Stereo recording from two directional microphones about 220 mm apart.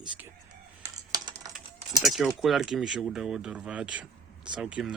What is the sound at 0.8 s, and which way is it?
Computer keyboard, 15° right (ahead or behind).